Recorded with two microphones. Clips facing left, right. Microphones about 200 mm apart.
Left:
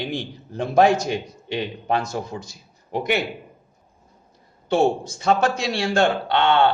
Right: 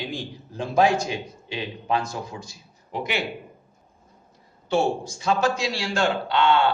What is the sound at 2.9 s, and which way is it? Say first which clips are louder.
Speech: left 5 dB; 55° left (ahead or behind).